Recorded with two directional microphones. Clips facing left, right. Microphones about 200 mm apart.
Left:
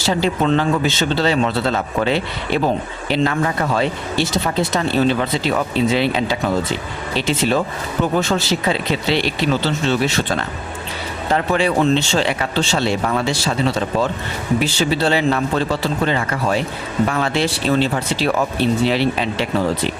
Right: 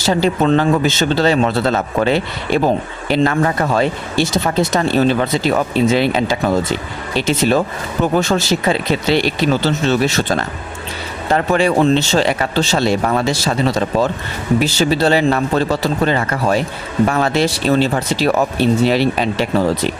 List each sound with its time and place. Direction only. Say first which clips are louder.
0.0 s speech: right 3 dB; 45° right (ahead or behind)